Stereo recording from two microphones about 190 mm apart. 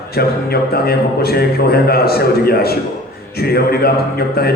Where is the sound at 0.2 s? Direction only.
55° left (ahead or behind).